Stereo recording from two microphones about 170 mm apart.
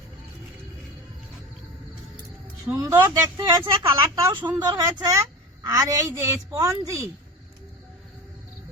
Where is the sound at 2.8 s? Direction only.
20° right (ahead or behind).